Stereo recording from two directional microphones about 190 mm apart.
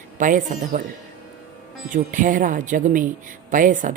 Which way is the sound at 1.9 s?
45° right (ahead or behind).